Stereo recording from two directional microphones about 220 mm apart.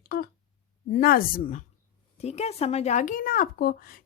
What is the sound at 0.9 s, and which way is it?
Speech, 40° left (ahead or behind).